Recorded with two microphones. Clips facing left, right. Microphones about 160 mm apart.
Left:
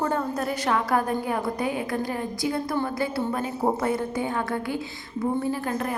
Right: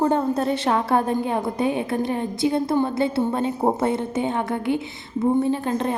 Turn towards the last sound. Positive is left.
turn(degrees=-25)  # may be behind; listen again after turning